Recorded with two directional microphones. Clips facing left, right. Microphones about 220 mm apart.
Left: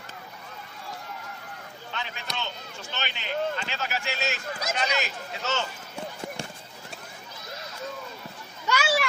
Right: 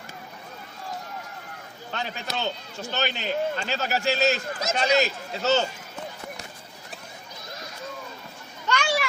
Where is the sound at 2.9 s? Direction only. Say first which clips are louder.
Right 5 dB; 40° right (ahead or behind).